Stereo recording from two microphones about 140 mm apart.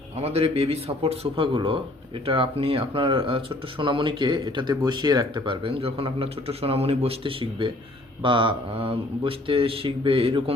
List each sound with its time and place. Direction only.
0.2 s a man's voice: 45° right (ahead or behind)